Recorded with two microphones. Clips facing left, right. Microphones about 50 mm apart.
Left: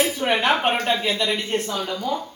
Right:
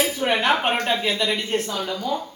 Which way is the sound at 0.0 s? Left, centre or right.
Centre.